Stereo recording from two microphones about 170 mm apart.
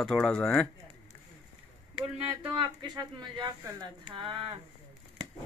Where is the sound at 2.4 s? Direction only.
30° right (ahead or behind).